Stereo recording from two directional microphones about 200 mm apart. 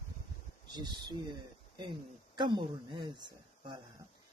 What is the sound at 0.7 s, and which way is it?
Speech, 20° right (ahead or behind).